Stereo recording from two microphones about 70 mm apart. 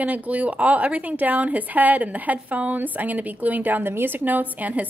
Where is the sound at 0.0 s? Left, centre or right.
Right.